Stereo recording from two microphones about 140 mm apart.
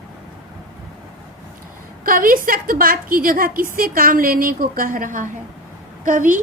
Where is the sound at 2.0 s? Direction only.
90° right; by 6.4 s 65° right (ahead or behind).